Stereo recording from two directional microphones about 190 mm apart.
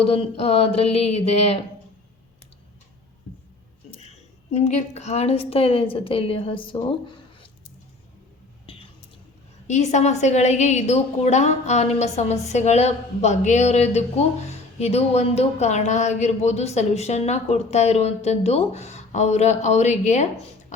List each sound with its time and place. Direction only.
0.0 s a woman's voice: 30° left (ahead or behind)
4.5 s a woman's voice: 35° left (ahead or behind)
8.6 s a sound: 30° left (ahead or behind)
9.6 s a woman's voice: 40° left (ahead or behind)